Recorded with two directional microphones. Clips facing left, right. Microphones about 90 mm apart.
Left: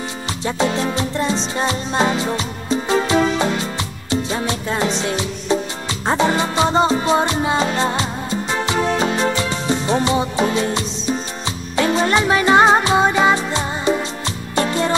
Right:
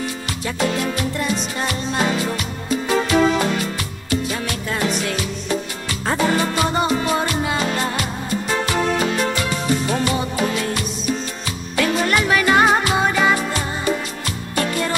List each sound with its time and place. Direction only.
0.5 s music: 25° left (ahead or behind)